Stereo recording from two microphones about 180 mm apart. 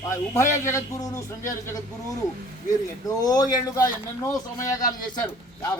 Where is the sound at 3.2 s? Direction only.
20° left (ahead or behind).